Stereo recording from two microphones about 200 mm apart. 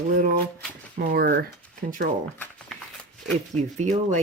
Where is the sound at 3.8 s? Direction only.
35° right (ahead or behind).